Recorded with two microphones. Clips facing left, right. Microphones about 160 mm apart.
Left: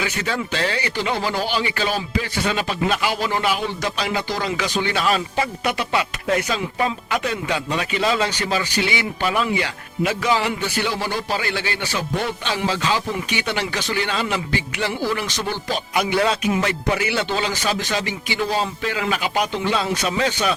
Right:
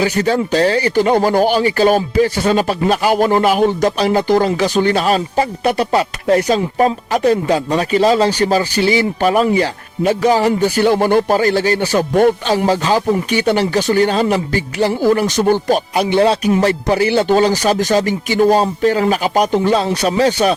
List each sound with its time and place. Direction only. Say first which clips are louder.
0.0 s speech: right 10 dB; 35° right (ahead or behind)
16.0 s speech: right 4 dB; 30° right (ahead or behind)